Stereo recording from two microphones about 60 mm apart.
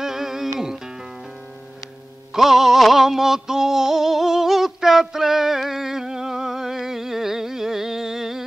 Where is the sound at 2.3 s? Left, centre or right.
Centre.